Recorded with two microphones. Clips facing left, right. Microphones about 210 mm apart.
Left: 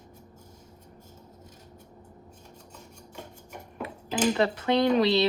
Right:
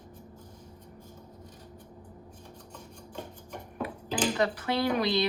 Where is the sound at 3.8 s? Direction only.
25° left (ahead or behind).